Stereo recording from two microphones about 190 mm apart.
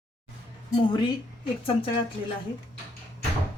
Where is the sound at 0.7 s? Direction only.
25° left (ahead or behind).